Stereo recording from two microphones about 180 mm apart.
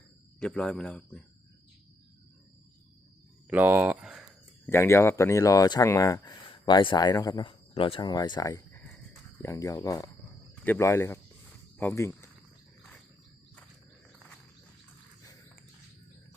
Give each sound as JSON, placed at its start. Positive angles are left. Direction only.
{"t": 0.3, "sound": "speech", "side_deg": 5}
{"t": 3.4, "sound": "a sound", "side_deg": -10}
{"t": 4.6, "sound": "speech", "side_deg": 15}